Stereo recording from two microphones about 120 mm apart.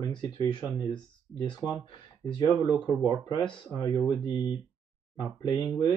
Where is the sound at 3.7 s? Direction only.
30° left (ahead or behind).